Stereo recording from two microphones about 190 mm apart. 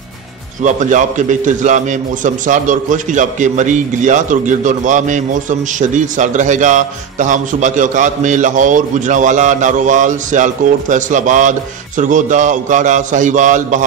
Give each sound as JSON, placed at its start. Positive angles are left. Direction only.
{"t": 0.6, "sound": "a man's voice", "side_deg": -40}